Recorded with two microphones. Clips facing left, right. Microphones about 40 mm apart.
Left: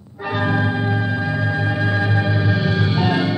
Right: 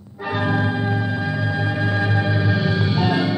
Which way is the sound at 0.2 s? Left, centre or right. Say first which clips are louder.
Left 1 dB; centre.